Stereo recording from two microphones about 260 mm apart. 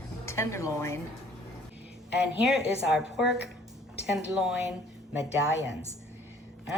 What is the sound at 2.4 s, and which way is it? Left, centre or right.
A woman's voice, centre.